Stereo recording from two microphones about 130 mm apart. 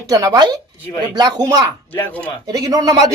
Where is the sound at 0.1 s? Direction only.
25° right (ahead or behind).